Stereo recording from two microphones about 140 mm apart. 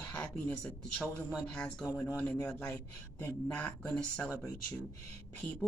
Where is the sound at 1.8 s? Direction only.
25° left (ahead or behind).